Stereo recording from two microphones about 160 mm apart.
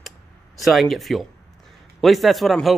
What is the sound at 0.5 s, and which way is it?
A man's voice, centre (ahead or behind).